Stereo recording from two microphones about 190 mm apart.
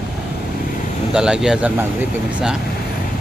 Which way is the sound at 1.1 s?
5° right (ahead or behind).